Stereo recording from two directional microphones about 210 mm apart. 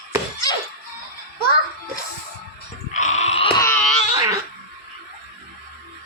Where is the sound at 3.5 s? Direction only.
10° left (ahead or behind).